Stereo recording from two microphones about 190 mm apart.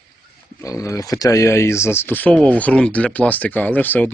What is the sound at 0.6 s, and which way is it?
Speech, 15° left (ahead or behind).